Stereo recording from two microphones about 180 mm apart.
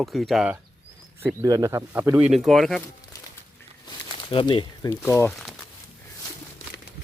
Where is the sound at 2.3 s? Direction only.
Centre (ahead or behind).